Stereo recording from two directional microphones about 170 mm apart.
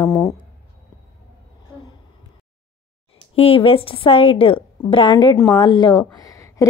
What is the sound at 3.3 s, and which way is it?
A woman's voice, 35° left (ahead or behind).